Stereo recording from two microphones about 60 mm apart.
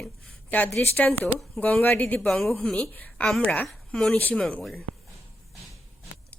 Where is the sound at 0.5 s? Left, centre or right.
Left.